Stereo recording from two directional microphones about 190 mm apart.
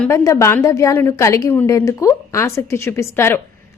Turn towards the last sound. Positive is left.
turn(degrees=15)  # may be behind; listen again after turning